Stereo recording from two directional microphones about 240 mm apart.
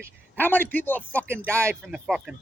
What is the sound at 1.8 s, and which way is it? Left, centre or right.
Speech, centre.